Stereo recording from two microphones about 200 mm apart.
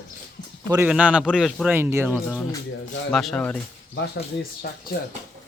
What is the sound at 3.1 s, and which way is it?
Speech, 5° left (ahead or behind).